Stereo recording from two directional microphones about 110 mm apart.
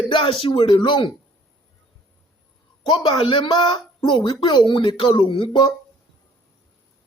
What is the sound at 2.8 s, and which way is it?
Speech, 45° left (ahead or behind).